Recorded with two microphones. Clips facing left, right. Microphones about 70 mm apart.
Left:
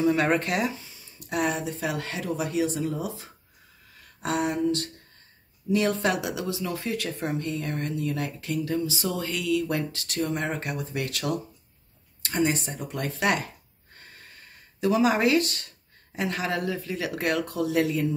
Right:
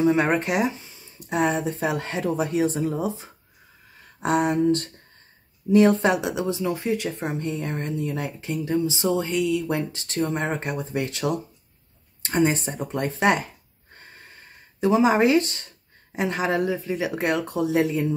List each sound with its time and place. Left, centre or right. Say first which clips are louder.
0.0 s speech: right 2 dB; right
13.9 s a sound: right 2 dB; right
16.2 s speech: right 5 dB; right